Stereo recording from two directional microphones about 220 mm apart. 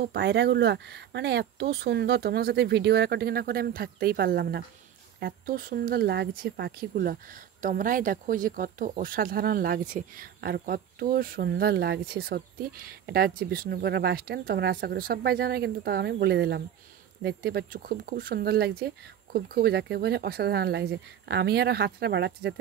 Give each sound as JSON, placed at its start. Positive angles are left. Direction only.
{"t": 0.0, "sound": "speech", "side_deg": -50}